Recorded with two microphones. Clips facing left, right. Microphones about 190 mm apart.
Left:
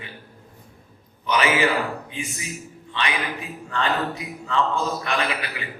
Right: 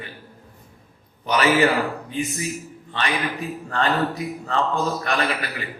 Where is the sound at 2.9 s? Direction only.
40° right (ahead or behind).